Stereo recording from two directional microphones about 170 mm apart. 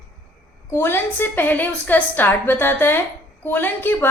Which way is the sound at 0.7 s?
10° left (ahead or behind).